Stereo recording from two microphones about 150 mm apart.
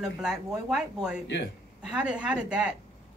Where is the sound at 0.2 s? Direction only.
5° right (ahead or behind).